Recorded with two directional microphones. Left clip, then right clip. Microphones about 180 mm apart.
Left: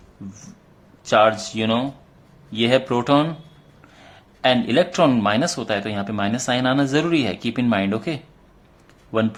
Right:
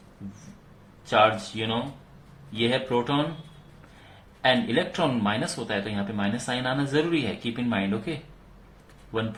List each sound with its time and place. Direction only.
1.1 s speech: 55° left (ahead or behind)
4.4 s speech: 50° left (ahead or behind)